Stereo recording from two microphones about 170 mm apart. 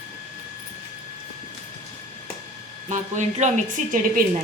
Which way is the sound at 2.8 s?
45° right (ahead or behind).